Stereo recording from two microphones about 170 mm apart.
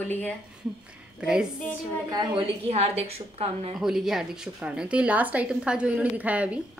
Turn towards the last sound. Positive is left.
turn(degrees=-5)  # may be behind; listen again after turning